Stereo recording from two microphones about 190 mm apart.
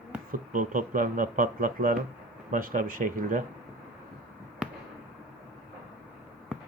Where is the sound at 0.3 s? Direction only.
45° right (ahead or behind).